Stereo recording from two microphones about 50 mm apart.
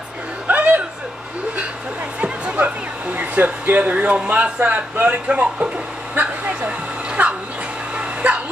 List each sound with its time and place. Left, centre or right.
0.5 s music: right
2.1 s music: right
2.5 s speech: right
6.1 s a sound: right
7.1 s music: right
7.9 s a sound: right